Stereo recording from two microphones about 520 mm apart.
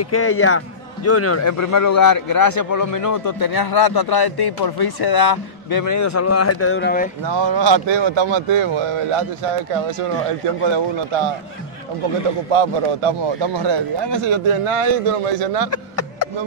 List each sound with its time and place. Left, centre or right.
0.0 s a man's voice: left
7.2 s speech: right
9.7 s speech: right
10.6 s a man's voice: right
12.5 s a man's voice: right
15.7 s a sound: left